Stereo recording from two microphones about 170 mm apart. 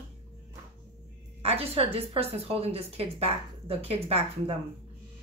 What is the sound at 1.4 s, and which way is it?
A woman's voice, 35° right (ahead or behind).